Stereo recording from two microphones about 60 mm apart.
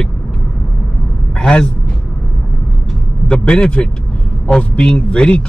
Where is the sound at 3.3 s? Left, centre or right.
Centre.